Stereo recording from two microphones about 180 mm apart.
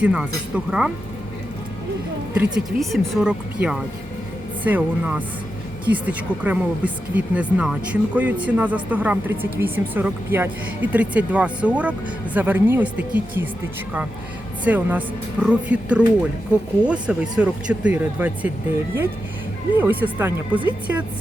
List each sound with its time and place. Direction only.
0.0 s speech: 5° right (ahead or behind)
2.3 s speech: 5° right (ahead or behind)
14.6 s speech: 10° right (ahead or behind)
19.8 s speech: 10° right (ahead or behind)